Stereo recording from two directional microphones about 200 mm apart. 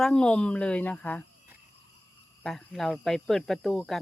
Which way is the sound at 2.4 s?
Centre (ahead or behind).